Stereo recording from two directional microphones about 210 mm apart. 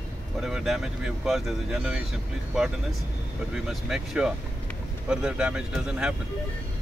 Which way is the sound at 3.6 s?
Centre (ahead or behind).